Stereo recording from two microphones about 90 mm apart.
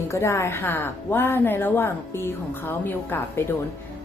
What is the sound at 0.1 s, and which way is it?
A woman's voice, 30° left (ahead or behind).